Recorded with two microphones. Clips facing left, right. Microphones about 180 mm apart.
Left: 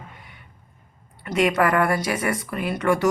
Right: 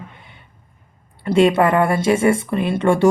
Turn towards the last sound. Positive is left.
turn(degrees=-30)  # may be behind; listen again after turning